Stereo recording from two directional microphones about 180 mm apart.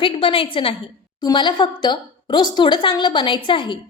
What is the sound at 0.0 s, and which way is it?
A woman's voice, 30° left (ahead or behind).